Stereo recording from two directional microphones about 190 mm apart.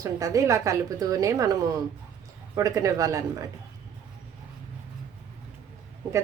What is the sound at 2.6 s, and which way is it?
Speech, 15° right (ahead or behind).